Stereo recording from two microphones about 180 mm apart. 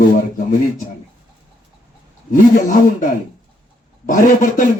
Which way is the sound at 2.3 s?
50° left (ahead or behind).